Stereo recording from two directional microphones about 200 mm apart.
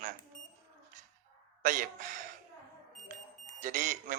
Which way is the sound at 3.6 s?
40° right (ahead or behind).